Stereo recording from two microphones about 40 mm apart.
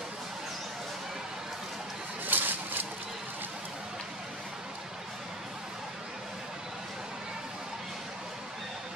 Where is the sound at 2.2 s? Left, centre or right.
Right.